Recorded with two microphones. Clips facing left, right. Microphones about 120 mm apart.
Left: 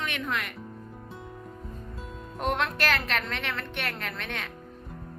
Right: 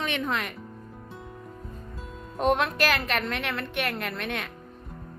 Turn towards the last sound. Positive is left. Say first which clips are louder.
# right 4 dB
turn(degrees=-10)  # may be behind; listen again after turning